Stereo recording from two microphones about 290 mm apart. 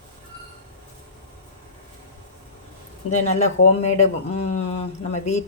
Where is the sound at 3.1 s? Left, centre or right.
Left.